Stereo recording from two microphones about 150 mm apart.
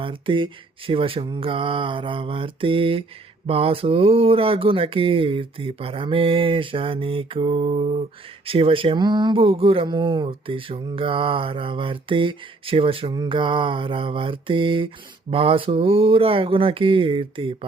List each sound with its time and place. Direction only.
0.0 s speech: 35° right (ahead or behind)